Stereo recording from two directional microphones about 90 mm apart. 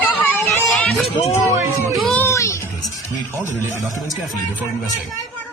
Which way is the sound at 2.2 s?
35° left (ahead or behind).